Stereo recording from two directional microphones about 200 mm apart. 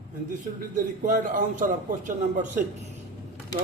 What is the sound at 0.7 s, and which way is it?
Speech, 40° right (ahead or behind).